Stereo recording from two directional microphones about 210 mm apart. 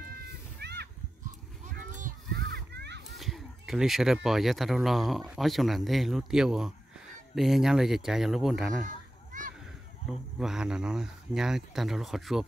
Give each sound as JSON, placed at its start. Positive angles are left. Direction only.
{"t": 0.6, "sound": "splash", "side_deg": -50}
{"t": 2.0, "sound": "children playing", "side_deg": -40}
{"t": 3.2, "sound": "speech", "side_deg": 0}
{"t": 8.8, "sound": "children playing", "side_deg": -40}
{"t": 10.0, "sound": "speech", "side_deg": 0}